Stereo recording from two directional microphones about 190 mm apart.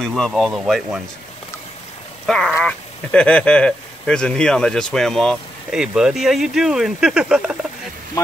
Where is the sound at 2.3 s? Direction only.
5° left (ahead or behind).